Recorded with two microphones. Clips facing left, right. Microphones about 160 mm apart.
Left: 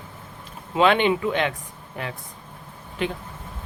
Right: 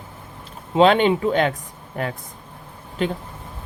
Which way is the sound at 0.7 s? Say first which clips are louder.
Right 4 dB; 35° right (ahead or behind).